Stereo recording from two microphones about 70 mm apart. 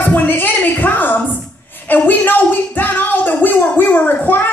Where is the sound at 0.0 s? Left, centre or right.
Left.